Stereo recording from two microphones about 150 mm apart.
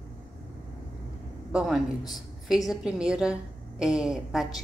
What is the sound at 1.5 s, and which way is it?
A woman's voice, 5° right (ahead or behind).